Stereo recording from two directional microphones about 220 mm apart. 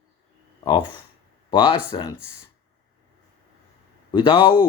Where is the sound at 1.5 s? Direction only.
20° left (ahead or behind).